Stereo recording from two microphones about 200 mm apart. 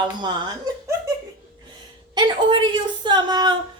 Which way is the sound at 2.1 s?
25° right (ahead or behind).